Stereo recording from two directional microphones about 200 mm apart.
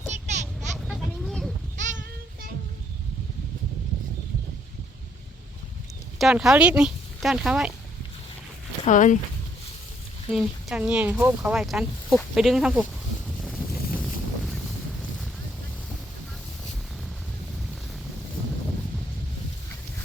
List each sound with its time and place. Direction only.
0.1 s a sound: 35° right (ahead or behind)
0.9 s a sound: centre (ahead or behind)
1.7 s goat: 40° right (ahead or behind)
6.1 s speech: centre (ahead or behind)
8.8 s speech: 40° left (ahead or behind)
10.3 s speech: 5° right (ahead or behind)
13.4 s boat: centre (ahead or behind)